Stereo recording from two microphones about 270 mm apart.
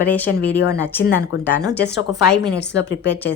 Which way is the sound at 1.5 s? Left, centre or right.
Centre.